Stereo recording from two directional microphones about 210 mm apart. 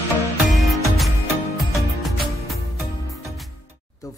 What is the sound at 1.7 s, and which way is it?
Music, centre (ahead or behind).